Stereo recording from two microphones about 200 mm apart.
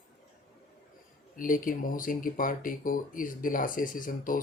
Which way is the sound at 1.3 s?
45° left (ahead or behind).